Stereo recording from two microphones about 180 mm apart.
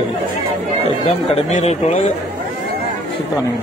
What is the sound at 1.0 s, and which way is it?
Speech, 35° left (ahead or behind).